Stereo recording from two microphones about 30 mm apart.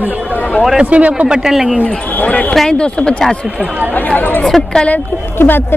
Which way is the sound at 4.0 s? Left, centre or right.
Left.